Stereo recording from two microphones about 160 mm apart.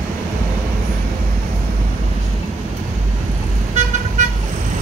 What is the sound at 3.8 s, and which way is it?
Vehicle, 45° right (ahead or behind).